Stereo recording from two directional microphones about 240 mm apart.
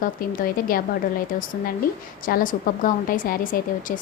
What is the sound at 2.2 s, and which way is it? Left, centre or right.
Speech, left.